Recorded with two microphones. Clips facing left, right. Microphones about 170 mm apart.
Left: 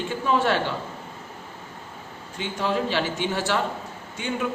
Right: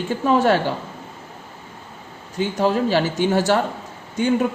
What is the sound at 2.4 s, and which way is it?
Speech, 40° right (ahead or behind).